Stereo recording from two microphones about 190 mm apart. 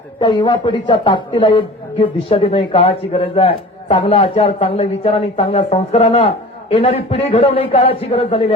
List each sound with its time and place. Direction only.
0.2 s a woman's voice: 25° left (ahead or behind)